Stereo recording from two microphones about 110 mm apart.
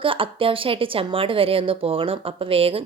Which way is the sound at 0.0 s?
55° right (ahead or behind).